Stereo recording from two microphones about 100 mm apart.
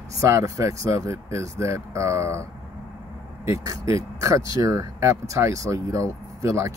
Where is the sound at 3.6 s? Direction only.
35° right (ahead or behind).